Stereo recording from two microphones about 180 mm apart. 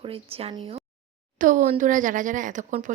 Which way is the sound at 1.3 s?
45° right (ahead or behind).